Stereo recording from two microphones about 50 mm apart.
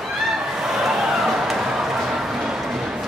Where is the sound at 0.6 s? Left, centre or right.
Centre.